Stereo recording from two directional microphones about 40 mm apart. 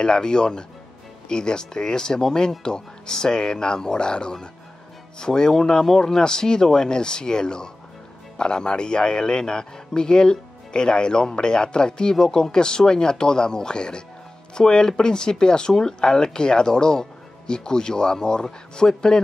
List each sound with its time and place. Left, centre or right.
0.0 s a man's voice: centre